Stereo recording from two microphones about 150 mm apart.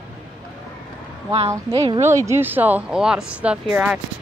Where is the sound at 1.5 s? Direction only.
20° right (ahead or behind).